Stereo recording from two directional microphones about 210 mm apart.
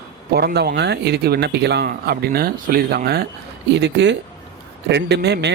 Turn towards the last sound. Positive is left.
turn(degrees=-55)  # may be behind; listen again after turning